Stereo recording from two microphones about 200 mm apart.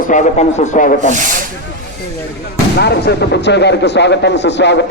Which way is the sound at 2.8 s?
55° left (ahead or behind).